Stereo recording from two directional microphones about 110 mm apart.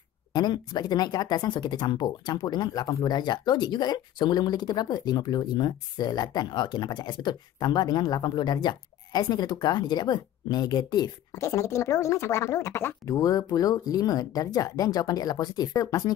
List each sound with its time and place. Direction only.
0.3 s speech: 40° left (ahead or behind)
11.3 s speech: 25° left (ahead or behind)